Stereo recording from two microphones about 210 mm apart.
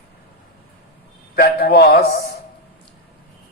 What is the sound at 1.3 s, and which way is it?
Mantra, 45° left (ahead or behind).